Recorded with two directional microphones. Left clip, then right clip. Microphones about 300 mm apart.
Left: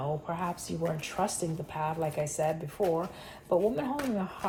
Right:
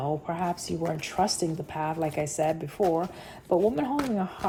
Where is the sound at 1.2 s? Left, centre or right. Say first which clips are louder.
Right 5 dB; right.